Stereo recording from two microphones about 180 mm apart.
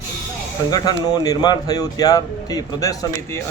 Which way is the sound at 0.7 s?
20° left (ahead or behind).